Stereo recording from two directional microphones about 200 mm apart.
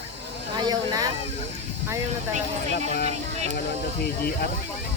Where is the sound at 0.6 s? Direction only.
20° right (ahead or behind).